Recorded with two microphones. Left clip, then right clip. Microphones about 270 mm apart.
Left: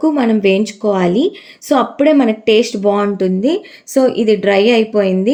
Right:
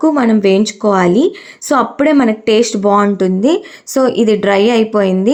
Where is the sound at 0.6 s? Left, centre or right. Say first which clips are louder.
Right 3 dB; centre.